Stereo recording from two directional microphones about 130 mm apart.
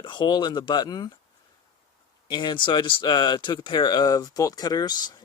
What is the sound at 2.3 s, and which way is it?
Speech, 35° left (ahead or behind).